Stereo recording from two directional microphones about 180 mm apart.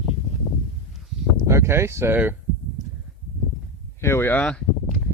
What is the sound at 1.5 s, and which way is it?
Speech, 15° right (ahead or behind).